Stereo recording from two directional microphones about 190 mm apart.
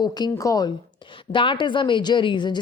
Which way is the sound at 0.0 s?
20° left (ahead or behind).